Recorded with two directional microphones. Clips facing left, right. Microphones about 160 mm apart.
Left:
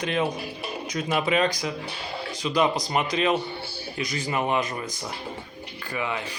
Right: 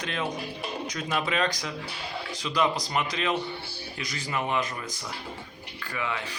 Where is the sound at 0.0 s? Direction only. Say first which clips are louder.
Left 5 dB; 15° left (ahead or behind).